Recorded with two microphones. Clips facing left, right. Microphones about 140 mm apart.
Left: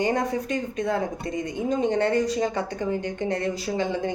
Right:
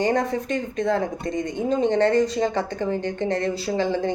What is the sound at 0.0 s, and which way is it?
Speech, 10° left (ahead or behind).